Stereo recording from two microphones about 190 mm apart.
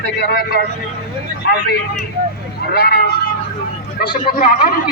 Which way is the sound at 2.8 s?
50° left (ahead or behind).